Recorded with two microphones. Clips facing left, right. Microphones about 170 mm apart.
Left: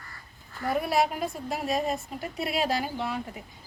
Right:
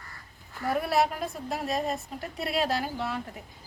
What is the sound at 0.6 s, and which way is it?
A woman's voice, centre (ahead or behind).